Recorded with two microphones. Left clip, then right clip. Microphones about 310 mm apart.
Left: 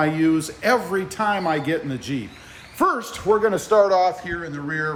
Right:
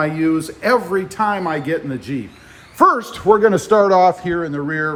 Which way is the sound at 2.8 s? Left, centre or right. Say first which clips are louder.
Right 7 dB; centre.